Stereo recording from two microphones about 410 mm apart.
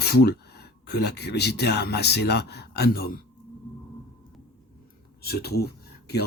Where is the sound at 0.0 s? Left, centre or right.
Left.